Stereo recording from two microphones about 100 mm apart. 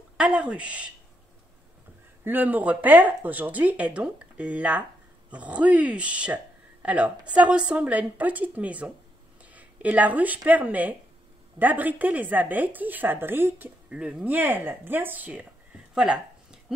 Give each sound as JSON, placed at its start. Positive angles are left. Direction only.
{"t": 0.2, "sound": "speech", "side_deg": -10}
{"t": 2.2, "sound": "speech", "side_deg": -20}
{"t": 13.8, "sound": "speech", "side_deg": -10}